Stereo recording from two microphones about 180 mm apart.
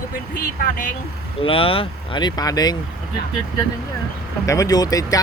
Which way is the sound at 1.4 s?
30° left (ahead or behind).